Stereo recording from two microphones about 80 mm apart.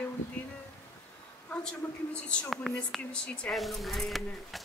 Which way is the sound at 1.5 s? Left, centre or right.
Centre.